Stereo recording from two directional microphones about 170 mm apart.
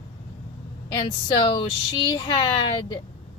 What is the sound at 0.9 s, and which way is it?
Speech, 25° left (ahead or behind).